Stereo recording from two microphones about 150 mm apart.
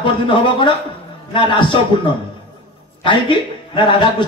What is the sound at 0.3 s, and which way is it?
A man's voice, 35° left (ahead or behind).